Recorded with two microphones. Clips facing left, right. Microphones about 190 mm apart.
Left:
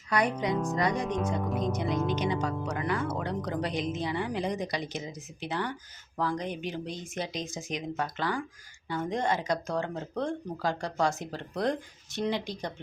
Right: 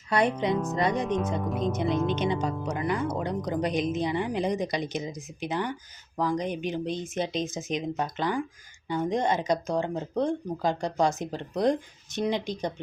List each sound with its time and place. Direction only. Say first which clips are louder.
0.1 s speech: right 3 dB; 25° right (ahead or behind)
0.5 s speech: right 2 dB; 5° right (ahead or behind)
0.8 s speech: right 3 dB; 20° right (ahead or behind)
1.0 s speech: right 2 dB; centre (ahead or behind)
2.1 s speech: right 2 dB; 25° right (ahead or behind)